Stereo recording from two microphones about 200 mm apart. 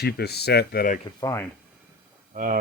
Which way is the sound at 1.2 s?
15° left (ahead or behind).